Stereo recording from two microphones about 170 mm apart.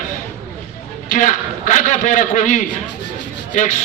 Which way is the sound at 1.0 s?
45° left (ahead or behind).